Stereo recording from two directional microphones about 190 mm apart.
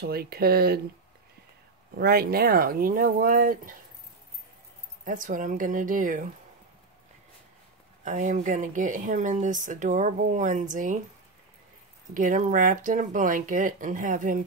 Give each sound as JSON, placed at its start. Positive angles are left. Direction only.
{"t": 0.1, "sound": "speech", "side_deg": -55}
{"t": 2.0, "sound": "speech", "side_deg": -55}
{"t": 5.0, "sound": "speech", "side_deg": -45}
{"t": 8.0, "sound": "speech", "side_deg": -40}
{"t": 12.1, "sound": "speech", "side_deg": -45}